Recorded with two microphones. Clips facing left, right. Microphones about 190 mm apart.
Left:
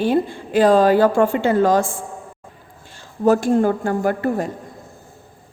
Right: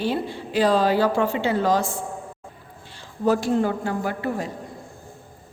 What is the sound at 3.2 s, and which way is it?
A woman's voice, 45° left (ahead or behind).